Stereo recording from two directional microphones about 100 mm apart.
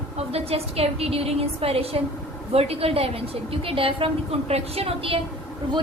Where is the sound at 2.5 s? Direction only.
90° right; by 5.2 s 70° right (ahead or behind).